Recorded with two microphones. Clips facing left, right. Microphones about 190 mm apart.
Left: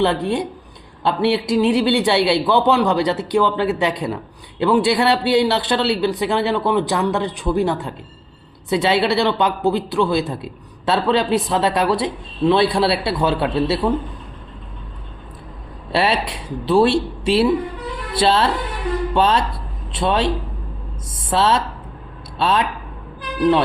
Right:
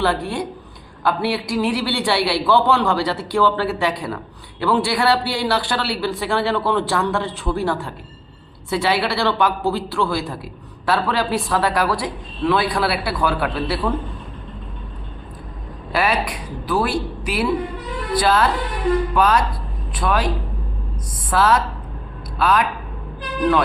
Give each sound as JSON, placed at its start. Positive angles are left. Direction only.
{"t": 0.0, "sound": "a man's voice", "side_deg": 20}
{"t": 15.9, "sound": "a man's voice", "side_deg": 25}